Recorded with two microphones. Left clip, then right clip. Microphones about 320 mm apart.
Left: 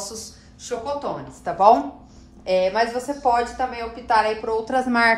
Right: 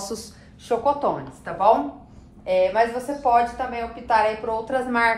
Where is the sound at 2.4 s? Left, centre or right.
Left.